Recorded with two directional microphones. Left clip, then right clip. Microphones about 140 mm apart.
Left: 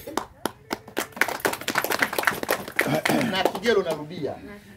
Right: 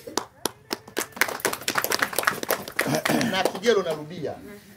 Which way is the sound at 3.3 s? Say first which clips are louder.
Even; centre (ahead or behind).